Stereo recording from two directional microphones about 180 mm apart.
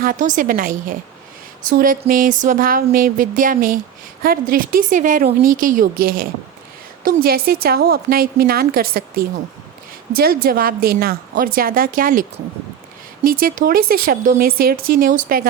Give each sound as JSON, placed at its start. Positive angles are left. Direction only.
{"t": 0.0, "sound": "a woman's voice", "side_deg": -50}
{"t": 13.2, "sound": "speech", "side_deg": -50}